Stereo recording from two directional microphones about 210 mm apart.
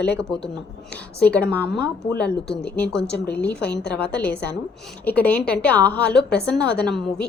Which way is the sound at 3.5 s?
50° left (ahead or behind).